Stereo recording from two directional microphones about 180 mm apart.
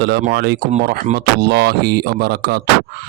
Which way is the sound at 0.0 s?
65° right (ahead or behind).